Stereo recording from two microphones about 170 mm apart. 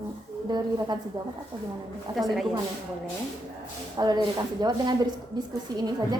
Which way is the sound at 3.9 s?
25° right (ahead or behind).